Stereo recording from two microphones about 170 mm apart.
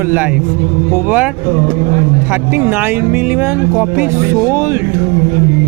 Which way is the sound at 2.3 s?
15° right (ahead or behind).